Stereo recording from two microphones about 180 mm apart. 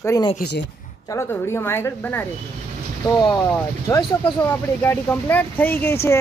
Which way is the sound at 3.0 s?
25° left (ahead or behind).